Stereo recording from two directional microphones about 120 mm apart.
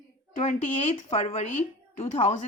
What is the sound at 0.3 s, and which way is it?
A woman's voice, 70° left (ahead or behind).